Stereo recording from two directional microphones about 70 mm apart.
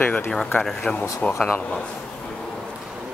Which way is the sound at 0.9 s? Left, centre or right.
Centre.